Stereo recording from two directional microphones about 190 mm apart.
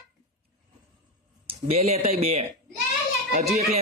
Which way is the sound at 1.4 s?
30° right (ahead or behind).